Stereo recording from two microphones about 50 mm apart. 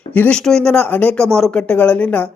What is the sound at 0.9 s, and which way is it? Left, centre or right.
A man's voice, left.